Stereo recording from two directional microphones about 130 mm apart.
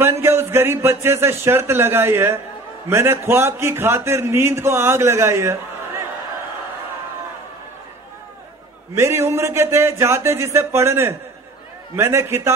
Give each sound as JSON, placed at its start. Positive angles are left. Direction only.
{"t": 0.0, "sound": "a man's voice", "side_deg": -20}
{"t": 8.9, "sound": "a man's voice", "side_deg": -20}